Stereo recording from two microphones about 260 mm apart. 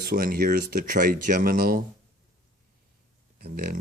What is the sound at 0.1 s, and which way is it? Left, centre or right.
Speech, right.